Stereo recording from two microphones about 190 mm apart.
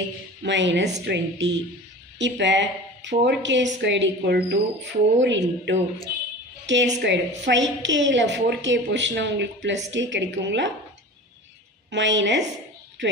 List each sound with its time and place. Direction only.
0.4 s a woman's voice: 70° right (ahead or behind)
5.2 s a woman's voice: 75° right (ahead or behind)
11.9 s a woman's voice: 70° right (ahead or behind)